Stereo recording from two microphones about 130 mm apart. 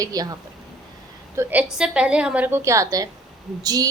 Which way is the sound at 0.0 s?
30° right (ahead or behind).